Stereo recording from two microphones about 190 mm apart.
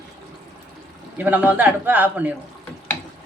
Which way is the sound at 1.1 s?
10° right (ahead or behind).